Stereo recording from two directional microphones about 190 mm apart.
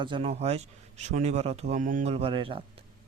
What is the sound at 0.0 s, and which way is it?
A man's voice, 30° right (ahead or behind).